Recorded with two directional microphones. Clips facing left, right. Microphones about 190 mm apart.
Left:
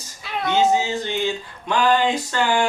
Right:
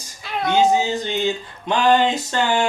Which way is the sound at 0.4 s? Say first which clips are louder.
Right 2 dB; 15° right (ahead or behind).